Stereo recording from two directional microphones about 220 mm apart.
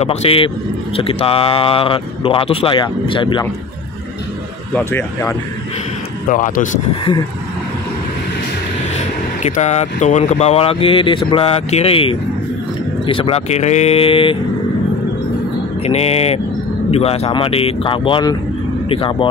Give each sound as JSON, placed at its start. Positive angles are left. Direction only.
{"t": 0.0, "sound": "speech", "side_deg": 30}
{"t": 4.7, "sound": "speech", "side_deg": 5}
{"t": 6.2, "sound": "speech", "side_deg": 35}
{"t": 9.4, "sound": "speech", "side_deg": 30}
{"t": 15.8, "sound": "speech", "side_deg": 30}